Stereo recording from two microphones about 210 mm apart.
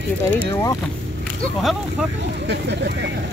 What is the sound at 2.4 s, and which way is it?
Speech, 55° right (ahead or behind).